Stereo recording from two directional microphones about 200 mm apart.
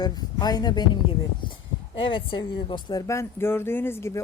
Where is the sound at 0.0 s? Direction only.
20° left (ahead or behind).